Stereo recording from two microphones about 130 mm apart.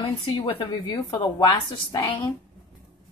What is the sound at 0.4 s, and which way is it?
Speech, 40° left (ahead or behind).